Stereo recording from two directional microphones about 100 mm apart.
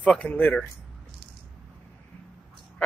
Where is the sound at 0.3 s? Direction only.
20° left (ahead or behind).